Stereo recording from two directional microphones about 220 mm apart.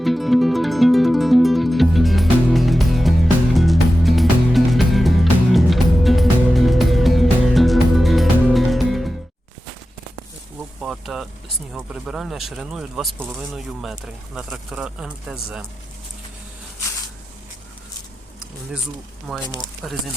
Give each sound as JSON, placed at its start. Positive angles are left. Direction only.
{"t": 0.0, "sound": "music", "side_deg": 0}
{"t": 10.8, "sound": "a sound", "side_deg": 0}
{"t": 11.7, "sound": "speech", "side_deg": -5}
{"t": 19.5, "sound": "speech", "side_deg": 20}